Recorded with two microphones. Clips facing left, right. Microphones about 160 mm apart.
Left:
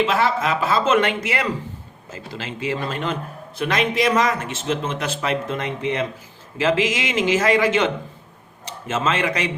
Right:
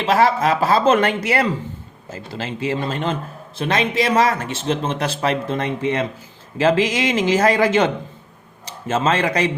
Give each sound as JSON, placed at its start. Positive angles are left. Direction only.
{"t": 0.0, "sound": "speech", "side_deg": -40}
{"t": 8.9, "sound": "speech", "side_deg": -35}